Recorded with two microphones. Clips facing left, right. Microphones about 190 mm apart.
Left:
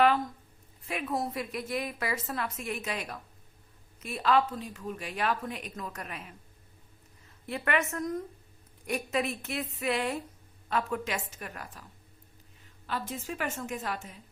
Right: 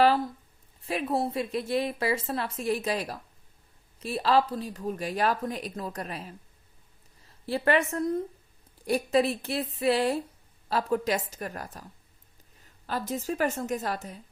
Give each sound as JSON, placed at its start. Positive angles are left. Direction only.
{"t": 0.9, "sound": "a woman's voice", "side_deg": -30}
{"t": 12.9, "sound": "a woman's voice", "side_deg": -40}